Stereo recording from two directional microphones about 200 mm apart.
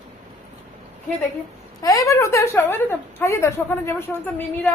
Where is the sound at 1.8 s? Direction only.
15° left (ahead or behind).